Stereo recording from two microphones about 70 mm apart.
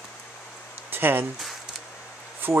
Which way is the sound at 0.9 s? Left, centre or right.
Right.